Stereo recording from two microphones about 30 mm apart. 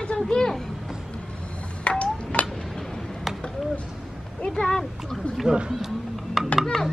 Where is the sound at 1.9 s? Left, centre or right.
Left.